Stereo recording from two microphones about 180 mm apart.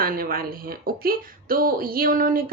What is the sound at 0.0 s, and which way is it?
Speech, 55° right (ahead or behind).